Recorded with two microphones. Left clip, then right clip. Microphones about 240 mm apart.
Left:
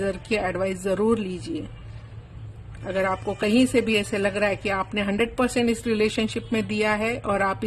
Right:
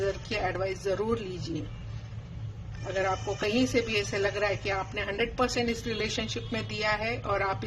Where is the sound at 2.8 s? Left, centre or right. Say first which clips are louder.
Left 5 dB; left.